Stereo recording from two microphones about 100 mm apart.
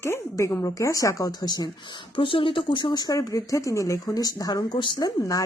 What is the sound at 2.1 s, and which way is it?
Speech, 60° left (ahead or behind).